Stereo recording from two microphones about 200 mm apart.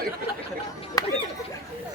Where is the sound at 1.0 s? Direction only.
20° left (ahead or behind).